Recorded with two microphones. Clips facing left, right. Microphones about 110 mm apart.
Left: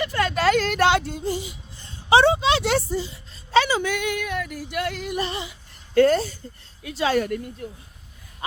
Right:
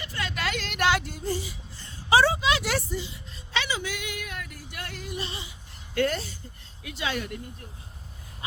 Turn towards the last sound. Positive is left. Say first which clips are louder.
# left 9 dB
turn(degrees=45)  # may be behind; listen again after turning